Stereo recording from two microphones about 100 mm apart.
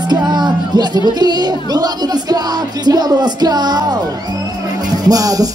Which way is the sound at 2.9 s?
40° right (ahead or behind).